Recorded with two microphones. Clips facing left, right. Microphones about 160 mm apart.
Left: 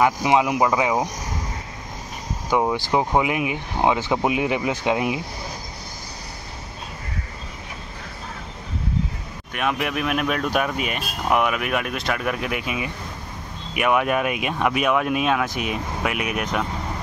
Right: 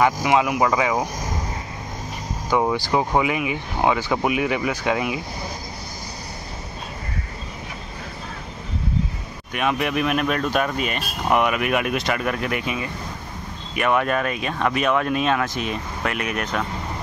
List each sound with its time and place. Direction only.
0.2 s speech: 20° left (ahead or behind)
0.6 s speech: 10° left (ahead or behind)
2.5 s speech: 15° left (ahead or behind)
9.5 s speech: centre (ahead or behind)